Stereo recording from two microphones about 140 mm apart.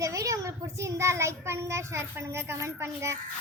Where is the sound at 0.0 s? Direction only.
20° right (ahead or behind).